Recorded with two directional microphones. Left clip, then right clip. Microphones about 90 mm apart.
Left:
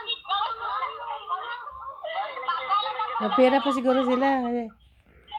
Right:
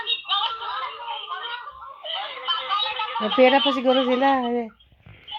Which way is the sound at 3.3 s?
20° right (ahead or behind).